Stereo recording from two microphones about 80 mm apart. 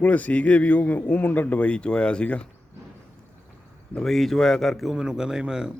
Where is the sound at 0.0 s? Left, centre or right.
Centre.